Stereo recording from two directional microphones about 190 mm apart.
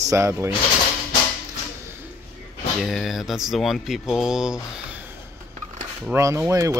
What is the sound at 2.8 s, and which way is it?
Speech, centre (ahead or behind).